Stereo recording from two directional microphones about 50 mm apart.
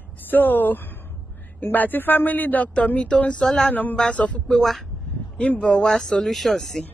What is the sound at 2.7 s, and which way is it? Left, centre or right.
Speech, left.